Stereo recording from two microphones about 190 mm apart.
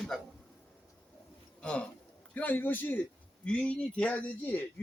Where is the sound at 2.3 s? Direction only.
10° left (ahead or behind).